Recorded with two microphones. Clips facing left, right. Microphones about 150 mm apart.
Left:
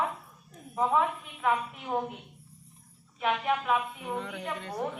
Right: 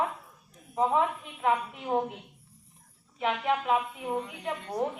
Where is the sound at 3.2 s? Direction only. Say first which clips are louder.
Even; 25° right (ahead or behind).